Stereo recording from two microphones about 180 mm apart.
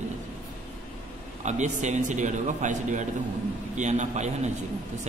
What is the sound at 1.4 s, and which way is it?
A man's voice, 40° right (ahead or behind).